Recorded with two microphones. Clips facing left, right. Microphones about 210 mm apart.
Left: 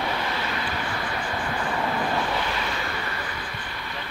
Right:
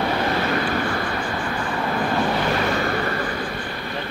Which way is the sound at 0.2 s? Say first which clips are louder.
Right 8 dB; 50° right (ahead or behind).